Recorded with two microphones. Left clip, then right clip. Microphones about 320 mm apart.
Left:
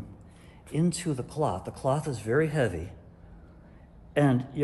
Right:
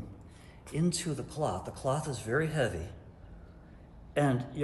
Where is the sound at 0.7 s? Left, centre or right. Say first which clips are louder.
Left 4 dB; left.